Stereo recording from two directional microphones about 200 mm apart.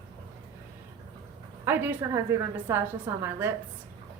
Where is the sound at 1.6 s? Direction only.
10° right (ahead or behind).